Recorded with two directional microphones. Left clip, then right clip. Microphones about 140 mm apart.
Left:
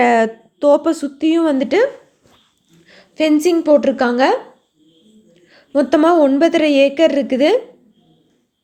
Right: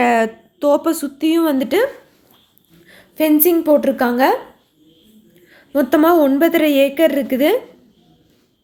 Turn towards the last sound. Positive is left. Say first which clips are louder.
# left 2 dB
turn(degrees=15)  # may be behind; listen again after turning